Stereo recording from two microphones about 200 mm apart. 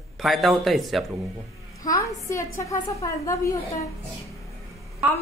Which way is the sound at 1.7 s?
15° left (ahead or behind).